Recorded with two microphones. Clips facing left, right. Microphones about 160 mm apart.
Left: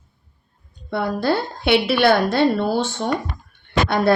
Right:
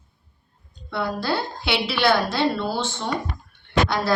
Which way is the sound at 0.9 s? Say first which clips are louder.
Left 5 dB; 50° left (ahead or behind).